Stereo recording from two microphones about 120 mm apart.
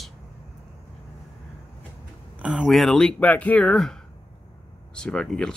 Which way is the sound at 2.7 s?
5° left (ahead or behind).